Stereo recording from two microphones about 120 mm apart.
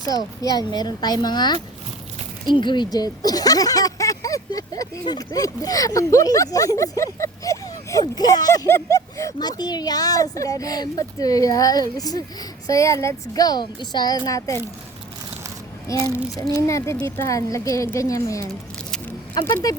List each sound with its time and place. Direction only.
0.1 s speech: 30° left (ahead or behind)
8.6 s speech: 20° left (ahead or behind)
16.1 s speech: 25° left (ahead or behind)